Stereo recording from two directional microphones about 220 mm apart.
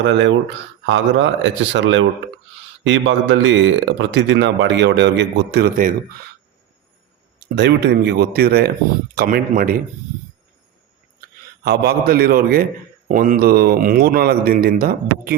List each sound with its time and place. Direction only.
0.0 s speech: 55° right (ahead or behind)
7.5 s speech: 50° right (ahead or behind)
11.6 s speech: 45° right (ahead or behind)